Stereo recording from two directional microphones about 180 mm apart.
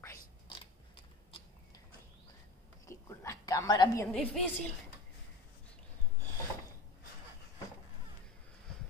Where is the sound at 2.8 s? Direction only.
15° left (ahead or behind).